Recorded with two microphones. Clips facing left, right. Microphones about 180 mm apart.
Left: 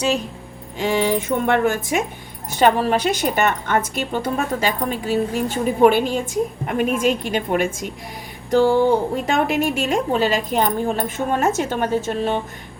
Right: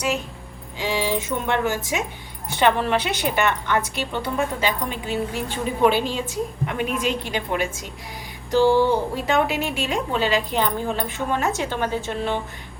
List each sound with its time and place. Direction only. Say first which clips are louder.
0.8 s a woman's voice: left 5 dB; 50° left (ahead or behind)
2.5 s a woman's voice: left 3 dB; 40° left (ahead or behind)
9.1 s a woman's voice: left 2 dB; 50° left (ahead or behind)